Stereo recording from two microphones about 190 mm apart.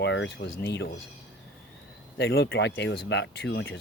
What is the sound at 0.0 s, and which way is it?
Speech, 70° left (ahead or behind).